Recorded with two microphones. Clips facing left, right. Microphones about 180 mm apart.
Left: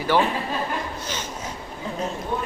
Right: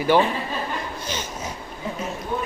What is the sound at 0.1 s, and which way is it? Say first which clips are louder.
Speech: right 2 dB; 15° right (ahead or behind).